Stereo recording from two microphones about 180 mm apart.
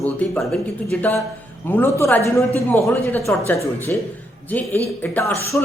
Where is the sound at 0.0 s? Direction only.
5° left (ahead or behind).